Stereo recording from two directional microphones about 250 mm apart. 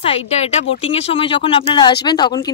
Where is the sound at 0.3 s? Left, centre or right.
Left.